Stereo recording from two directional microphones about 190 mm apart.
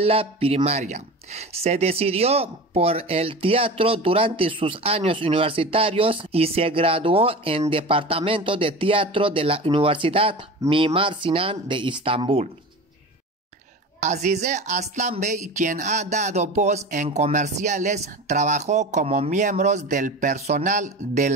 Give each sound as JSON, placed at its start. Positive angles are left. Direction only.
{"t": 0.0, "sound": "a woman's voice", "side_deg": -30}
{"t": 13.9, "sound": "a woman's voice", "side_deg": -40}